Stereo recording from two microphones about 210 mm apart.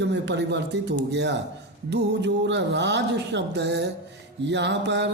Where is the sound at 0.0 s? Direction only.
55° right (ahead or behind).